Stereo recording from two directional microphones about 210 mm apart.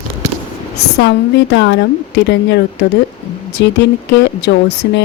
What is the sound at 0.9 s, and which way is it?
A woman's voice, 55° left (ahead or behind).